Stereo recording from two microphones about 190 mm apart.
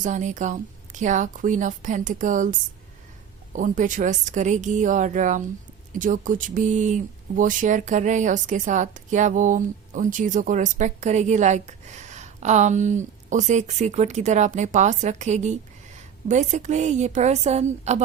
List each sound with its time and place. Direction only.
0.0 s speech: 40° right (ahead or behind)